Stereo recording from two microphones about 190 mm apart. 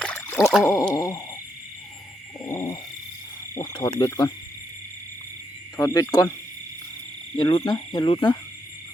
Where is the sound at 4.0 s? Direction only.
20° left (ahead or behind).